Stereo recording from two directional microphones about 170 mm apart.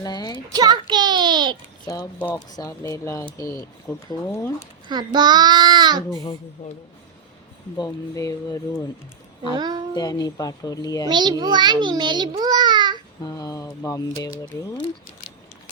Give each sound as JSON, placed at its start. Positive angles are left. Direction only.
{"t": 0.0, "sound": "a child's voice", "side_deg": 25}
{"t": 0.5, "sound": "a child's voice", "side_deg": -25}
{"t": 1.8, "sound": "speech", "side_deg": 20}
{"t": 2.1, "sound": "speech", "side_deg": 10}
{"t": 2.5, "sound": "a child's voice", "side_deg": 20}
{"t": 4.9, "sound": "a child's voice", "side_deg": -25}
{"t": 7.8, "sound": "a child's voice", "side_deg": 20}
{"t": 9.6, "sound": "a child's voice", "side_deg": -25}
{"t": 9.9, "sound": "a child's voice", "side_deg": 25}
{"t": 11.1, "sound": "a child's voice", "side_deg": -25}
{"t": 13.2, "sound": "a sound", "side_deg": 20}